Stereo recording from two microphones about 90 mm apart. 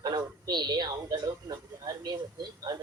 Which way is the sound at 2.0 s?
50° right (ahead or behind).